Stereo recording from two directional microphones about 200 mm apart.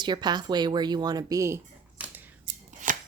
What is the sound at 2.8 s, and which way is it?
Chopping, 40° right (ahead or behind).